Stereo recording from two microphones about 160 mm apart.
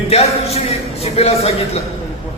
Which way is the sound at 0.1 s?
40° left (ahead or behind).